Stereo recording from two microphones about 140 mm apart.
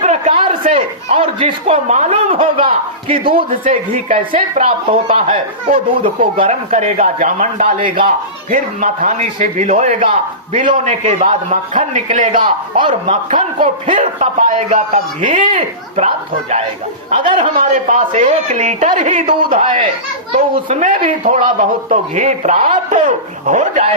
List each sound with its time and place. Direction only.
0.3 s speech: 40° right (ahead or behind)
6.5 s speech: 55° right (ahead or behind)
8.0 s speech: 75° right (ahead or behind); by 10.2 s 45° right (ahead or behind)
10.5 s speech: 70° right (ahead or behind)
12.4 s speech: 35° right (ahead or behind)
12.9 s speech: 65° right (ahead or behind)
15.4 s speech: 50° right (ahead or behind)
17.1 s speech: 40° right (ahead or behind)
17.6 s speech: 70° right (ahead or behind)
19.3 s speech: 40° right (ahead or behind)
20.7 s speech: 65° right (ahead or behind)